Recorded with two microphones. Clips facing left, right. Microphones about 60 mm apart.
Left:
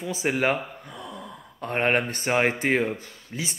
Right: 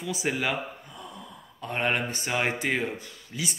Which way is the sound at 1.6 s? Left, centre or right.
Left.